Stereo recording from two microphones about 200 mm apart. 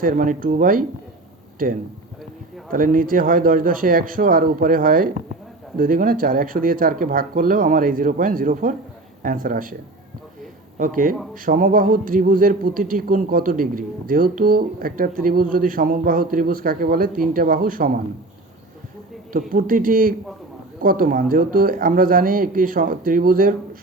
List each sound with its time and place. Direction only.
0.0 s speech: 45° right (ahead or behind)
10.8 s a man's voice: 40° right (ahead or behind)
19.3 s speech: 45° right (ahead or behind)